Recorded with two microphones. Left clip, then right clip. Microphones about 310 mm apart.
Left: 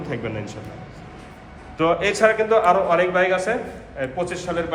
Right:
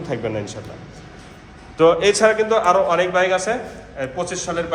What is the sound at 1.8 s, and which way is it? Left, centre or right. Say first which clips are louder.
A man's voice: right 4 dB; centre.